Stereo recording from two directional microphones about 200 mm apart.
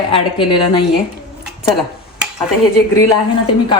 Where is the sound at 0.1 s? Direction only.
25° left (ahead or behind).